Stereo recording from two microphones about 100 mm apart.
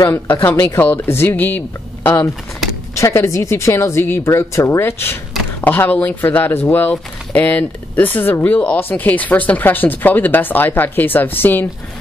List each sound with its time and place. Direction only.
0.0 s speech: 25° left (ahead or behind)
3.0 s speech: 30° left (ahead or behind)